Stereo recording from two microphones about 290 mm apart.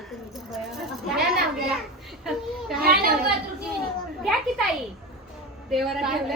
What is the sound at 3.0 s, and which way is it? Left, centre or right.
Speech, right.